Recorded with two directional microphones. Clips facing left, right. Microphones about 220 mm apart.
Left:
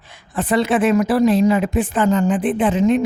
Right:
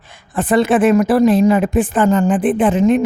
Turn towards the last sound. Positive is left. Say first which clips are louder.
# right 3 dB
turn(degrees=-50)  # may be behind; listen again after turning